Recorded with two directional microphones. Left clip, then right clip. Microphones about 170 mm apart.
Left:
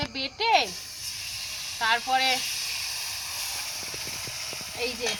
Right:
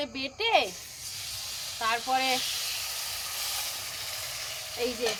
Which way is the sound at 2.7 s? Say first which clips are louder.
Left 2 dB; 5° left (ahead or behind).